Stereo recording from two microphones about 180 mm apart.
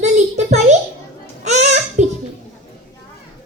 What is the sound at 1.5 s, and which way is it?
Music, 40° right (ahead or behind).